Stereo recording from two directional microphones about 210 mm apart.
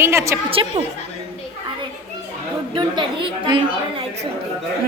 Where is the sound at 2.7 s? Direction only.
20° right (ahead or behind).